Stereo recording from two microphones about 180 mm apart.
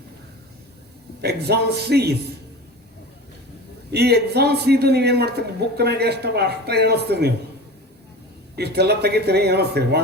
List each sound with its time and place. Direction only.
1.2 s a man's voice: 65° right (ahead or behind)
3.9 s a man's voice: 65° right (ahead or behind)
8.5 s a man's voice: 65° right (ahead or behind)